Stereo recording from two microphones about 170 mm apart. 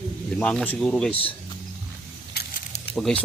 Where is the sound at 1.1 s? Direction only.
35° left (ahead or behind).